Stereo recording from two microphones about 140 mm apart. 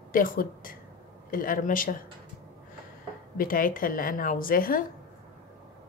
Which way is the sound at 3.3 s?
85° left.